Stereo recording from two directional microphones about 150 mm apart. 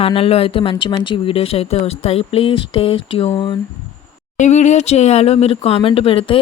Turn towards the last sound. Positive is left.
turn(degrees=35)  # may be behind; listen again after turning